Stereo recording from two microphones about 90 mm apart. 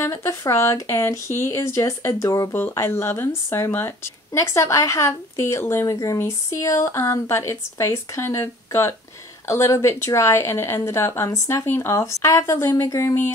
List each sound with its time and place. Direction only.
0.0 s a woman's voice: 30° left (ahead or behind)